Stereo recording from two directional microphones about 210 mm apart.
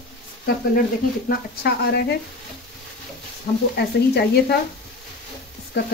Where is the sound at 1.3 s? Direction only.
50° left (ahead or behind).